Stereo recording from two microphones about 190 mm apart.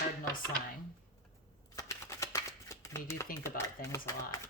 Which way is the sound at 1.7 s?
15° left (ahead or behind).